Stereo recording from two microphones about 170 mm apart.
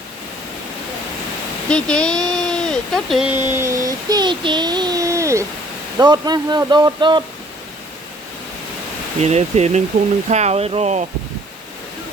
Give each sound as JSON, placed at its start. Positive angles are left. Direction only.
{"t": 1.7, "sound": "speech", "side_deg": 5}
{"t": 3.5, "sound": "child singing", "side_deg": -15}
{"t": 6.0, "sound": "speech", "side_deg": -25}
{"t": 9.2, "sound": "speech", "side_deg": -40}